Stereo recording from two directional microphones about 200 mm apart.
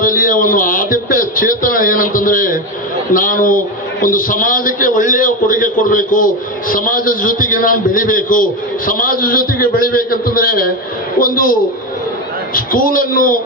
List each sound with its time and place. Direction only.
0.0 s a man's voice: 45° left (ahead or behind)
12.5 s a man's voice: 45° left (ahead or behind)